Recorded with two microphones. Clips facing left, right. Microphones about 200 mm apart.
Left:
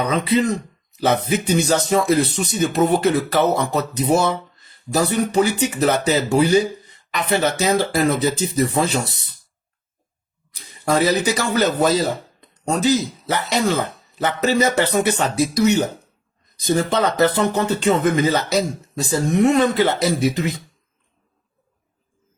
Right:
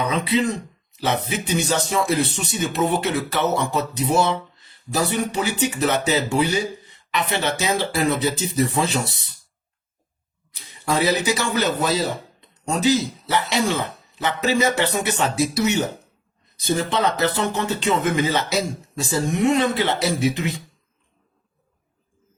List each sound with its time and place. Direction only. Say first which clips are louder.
0.1 s speech: left 3 dB; 40° left (ahead or behind)
10.5 s speech: left 4 dB; 40° left (ahead or behind)